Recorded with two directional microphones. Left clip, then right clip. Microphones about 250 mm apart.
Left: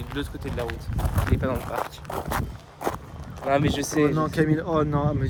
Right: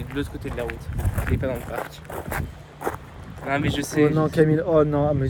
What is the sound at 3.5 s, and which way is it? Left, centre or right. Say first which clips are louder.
Speech: left 2 dB; left.